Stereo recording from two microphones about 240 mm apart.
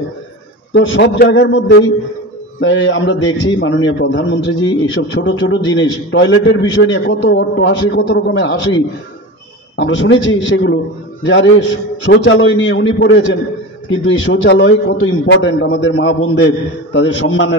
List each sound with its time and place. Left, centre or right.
0.7 s a man's voice: left